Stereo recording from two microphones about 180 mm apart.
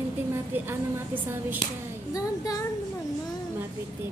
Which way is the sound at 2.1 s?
20° left (ahead or behind).